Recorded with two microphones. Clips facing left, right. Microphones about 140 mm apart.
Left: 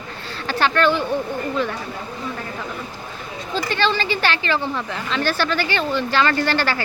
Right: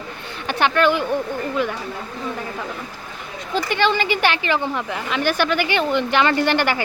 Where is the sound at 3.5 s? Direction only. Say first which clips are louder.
Right 2 dB; 15° right (ahead or behind).